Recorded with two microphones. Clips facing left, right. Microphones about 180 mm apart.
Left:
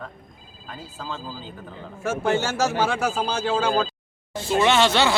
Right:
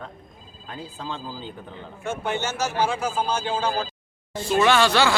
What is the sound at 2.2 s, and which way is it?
Speech, 90° left.